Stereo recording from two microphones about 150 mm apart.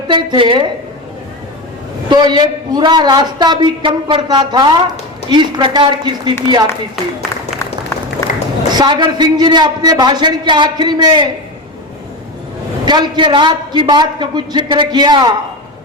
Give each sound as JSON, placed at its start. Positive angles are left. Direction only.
{"t": 0.1, "sound": "a man's voice", "side_deg": -35}
{"t": 2.0, "sound": "a man's voice", "side_deg": -30}
{"t": 6.9, "sound": "a sound", "side_deg": 0}
{"t": 8.7, "sound": "a man's voice", "side_deg": -30}
{"t": 12.8, "sound": "a man's voice", "side_deg": -30}